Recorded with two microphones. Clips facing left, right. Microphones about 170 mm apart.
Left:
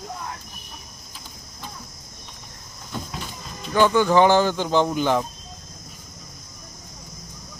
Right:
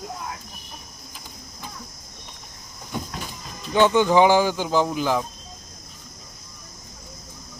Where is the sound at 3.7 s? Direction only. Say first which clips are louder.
Even; 20° right (ahead or behind); by 5.2 s centre (ahead or behind).